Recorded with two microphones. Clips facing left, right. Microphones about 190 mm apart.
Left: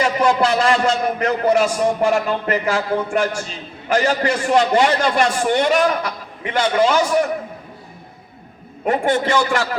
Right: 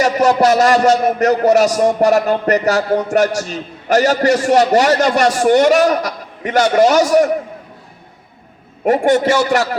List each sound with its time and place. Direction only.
0.0 s a man's voice: 45° right (ahead or behind)
8.9 s a man's voice: 45° right (ahead or behind)